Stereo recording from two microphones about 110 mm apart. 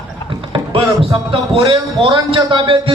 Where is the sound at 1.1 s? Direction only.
45° right (ahead or behind).